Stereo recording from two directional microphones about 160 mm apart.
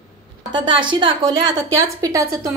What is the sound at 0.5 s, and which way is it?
Speech, 30° right (ahead or behind).